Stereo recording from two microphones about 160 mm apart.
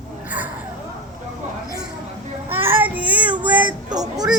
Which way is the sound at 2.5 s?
15° right (ahead or behind).